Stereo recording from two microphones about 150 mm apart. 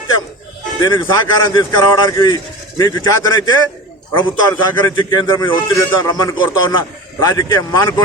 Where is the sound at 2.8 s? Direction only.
25° left (ahead or behind).